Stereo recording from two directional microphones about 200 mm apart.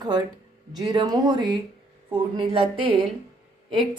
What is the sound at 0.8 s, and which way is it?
A woman's voice, 20° right (ahead or behind).